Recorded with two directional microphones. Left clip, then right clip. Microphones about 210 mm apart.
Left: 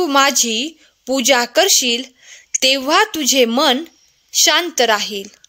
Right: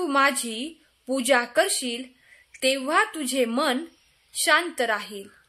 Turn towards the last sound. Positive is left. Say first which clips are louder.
# left 11 dB
turn(degrees=40)  # may be behind; listen again after turning